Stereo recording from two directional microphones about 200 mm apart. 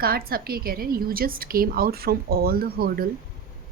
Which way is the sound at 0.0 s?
50° right (ahead or behind).